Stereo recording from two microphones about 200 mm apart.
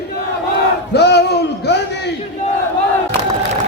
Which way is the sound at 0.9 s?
55° left (ahead or behind).